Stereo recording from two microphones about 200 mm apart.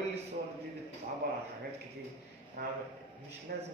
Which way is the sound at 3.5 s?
50° right (ahead or behind).